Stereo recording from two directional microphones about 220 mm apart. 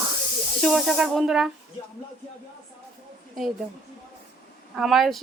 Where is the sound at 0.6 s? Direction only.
Centre (ahead or behind).